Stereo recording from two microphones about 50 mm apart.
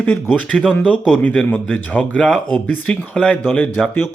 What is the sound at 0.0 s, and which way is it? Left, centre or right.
A man's voice, left.